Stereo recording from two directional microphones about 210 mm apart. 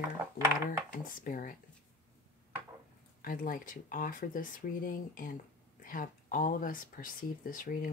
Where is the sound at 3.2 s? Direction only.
40° left (ahead or behind).